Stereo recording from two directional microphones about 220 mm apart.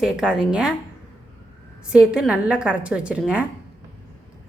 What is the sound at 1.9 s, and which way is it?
A woman's voice, 5° right (ahead or behind).